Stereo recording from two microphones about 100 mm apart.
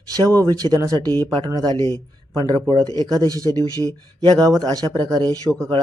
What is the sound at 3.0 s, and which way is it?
Speech, 40° right (ahead or behind).